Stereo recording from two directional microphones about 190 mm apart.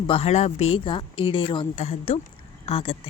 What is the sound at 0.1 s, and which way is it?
A woman's voice, 35° left (ahead or behind).